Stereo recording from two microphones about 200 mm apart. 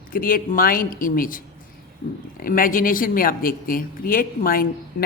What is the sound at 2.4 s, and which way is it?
A woman's voice, 45° left (ahead or behind).